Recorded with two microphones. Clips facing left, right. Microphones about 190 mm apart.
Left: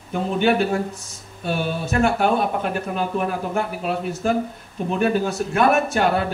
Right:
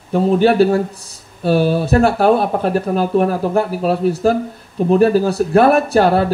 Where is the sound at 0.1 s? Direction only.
35° right (ahead or behind).